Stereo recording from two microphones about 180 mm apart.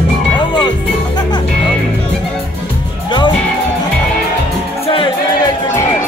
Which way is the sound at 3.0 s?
25° left (ahead or behind).